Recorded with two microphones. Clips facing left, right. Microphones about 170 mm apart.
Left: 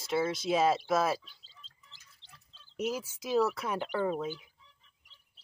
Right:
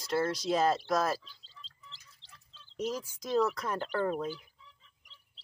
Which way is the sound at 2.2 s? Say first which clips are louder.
Even; 35° right (ahead or behind).